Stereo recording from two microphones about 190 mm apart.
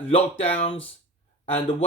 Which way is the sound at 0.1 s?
30° left (ahead or behind).